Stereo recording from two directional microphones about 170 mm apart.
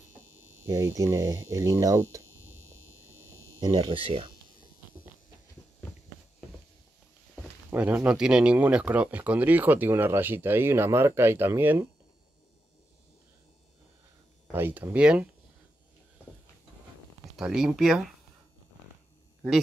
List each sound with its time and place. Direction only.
0.9 s speech: 20° right (ahead or behind)
3.5 s speech: 25° right (ahead or behind)
7.7 s speech: 10° right (ahead or behind)
14.5 s speech: 10° right (ahead or behind)
17.4 s speech: 5° right (ahead or behind)